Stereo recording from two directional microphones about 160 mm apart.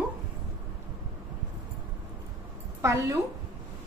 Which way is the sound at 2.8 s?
20° right (ahead or behind).